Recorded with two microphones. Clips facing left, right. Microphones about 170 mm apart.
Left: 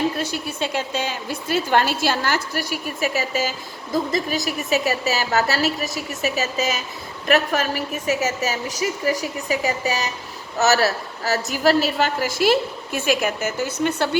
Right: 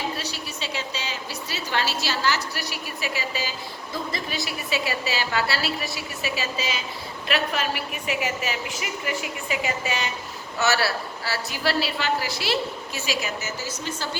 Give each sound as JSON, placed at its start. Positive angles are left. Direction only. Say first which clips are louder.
{"t": 0.2, "sound": "a woman's voice", "louder": "left 8 dB", "side_deg": 50}